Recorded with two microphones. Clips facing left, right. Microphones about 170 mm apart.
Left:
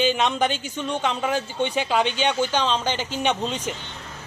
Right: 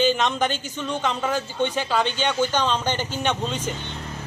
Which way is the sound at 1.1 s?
10° left (ahead or behind).